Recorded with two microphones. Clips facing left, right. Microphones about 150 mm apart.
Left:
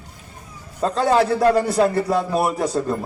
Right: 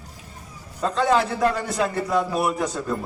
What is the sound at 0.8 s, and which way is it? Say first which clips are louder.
A man's voice: left 3 dB; 35° left (ahead or behind).